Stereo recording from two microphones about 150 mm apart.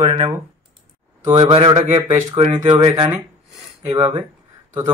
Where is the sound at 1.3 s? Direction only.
40° right (ahead or behind).